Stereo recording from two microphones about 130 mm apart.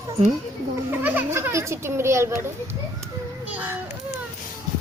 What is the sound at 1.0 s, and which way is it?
A child's voice, 15° right (ahead or behind).